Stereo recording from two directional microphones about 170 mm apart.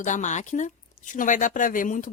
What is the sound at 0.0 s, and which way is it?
Speech, 45° left (ahead or behind).